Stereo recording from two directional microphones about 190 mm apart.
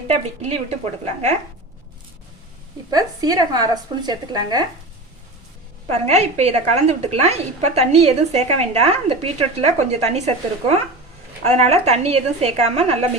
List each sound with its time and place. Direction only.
0.1 s a woman's voice: 35° right (ahead or behind)
2.9 s a woman's voice: 20° right (ahead or behind)
5.9 s a woman's voice: 35° right (ahead or behind)